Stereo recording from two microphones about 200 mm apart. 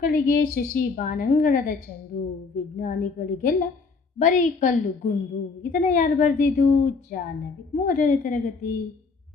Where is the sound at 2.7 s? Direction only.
45° left (ahead or behind).